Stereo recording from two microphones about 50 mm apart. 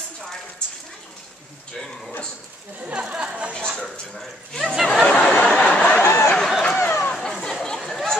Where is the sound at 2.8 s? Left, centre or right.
Right.